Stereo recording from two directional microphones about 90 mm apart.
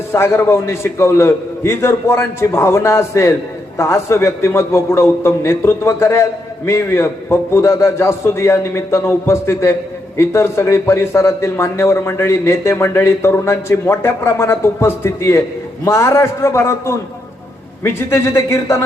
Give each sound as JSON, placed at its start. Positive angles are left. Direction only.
{"t": 0.1, "sound": "a man's voice", "side_deg": 25}